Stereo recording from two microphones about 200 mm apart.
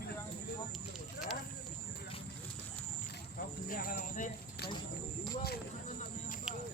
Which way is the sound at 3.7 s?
45° left (ahead or behind).